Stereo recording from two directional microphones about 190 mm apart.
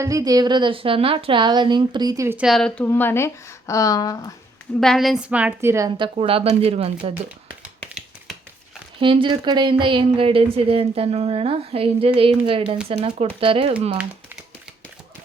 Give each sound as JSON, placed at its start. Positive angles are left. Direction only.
{"t": 0.0, "sound": "a woman's voice", "side_deg": -20}
{"t": 4.8, "sound": "a woman's voice", "side_deg": 0}
{"t": 6.1, "sound": "speech", "side_deg": -30}
{"t": 9.0, "sound": "speech", "side_deg": -25}